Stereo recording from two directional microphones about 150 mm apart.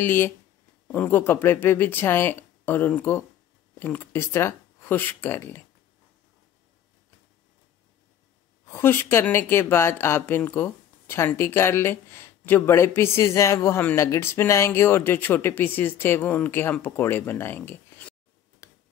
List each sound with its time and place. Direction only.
0.0 s speech: 15° left (ahead or behind)
8.7 s speech: 15° left (ahead or behind)
18.6 s tick-tock: 20° left (ahead or behind)